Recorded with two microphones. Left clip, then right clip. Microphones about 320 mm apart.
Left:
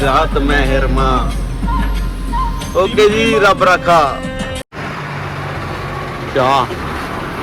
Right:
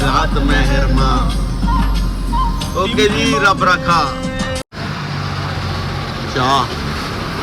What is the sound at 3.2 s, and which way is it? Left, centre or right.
Speech, centre.